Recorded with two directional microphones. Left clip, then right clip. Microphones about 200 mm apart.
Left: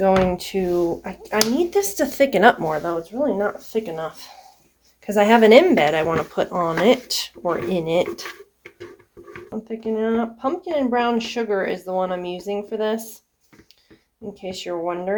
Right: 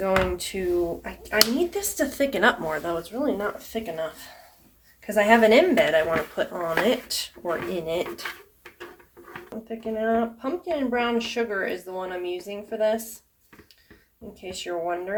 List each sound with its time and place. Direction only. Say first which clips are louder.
0.0 s speech: left 6 dB; 40° left (ahead or behind)
2.6 s speech: left 4 dB; 25° left (ahead or behind)
3.7 s speech: left 5 dB; 40° left (ahead or behind)
5.0 s speech: left 4 dB; 50° left (ahead or behind)
9.6 s speech: left 3 dB; 45° left (ahead or behind)
14.5 s speech: left 2 dB; 50° left (ahead or behind)